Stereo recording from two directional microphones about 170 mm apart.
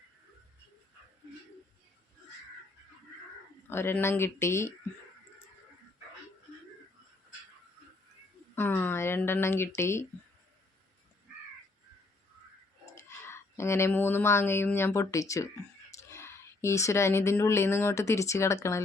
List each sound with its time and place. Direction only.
3.7 s speech: 15° left (ahead or behind)
8.5 s speech: 10° left (ahead or behind)
12.8 s speech: 15° left (ahead or behind)